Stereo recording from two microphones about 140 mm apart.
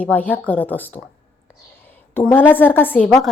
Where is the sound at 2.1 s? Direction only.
15° left (ahead or behind).